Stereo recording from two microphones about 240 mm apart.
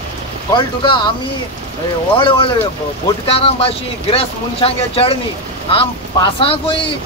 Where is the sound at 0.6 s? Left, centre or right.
Centre.